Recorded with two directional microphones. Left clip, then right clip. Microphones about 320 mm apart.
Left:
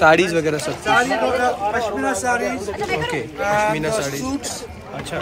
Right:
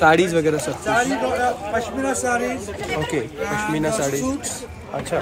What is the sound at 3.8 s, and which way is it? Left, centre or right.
Speech, centre.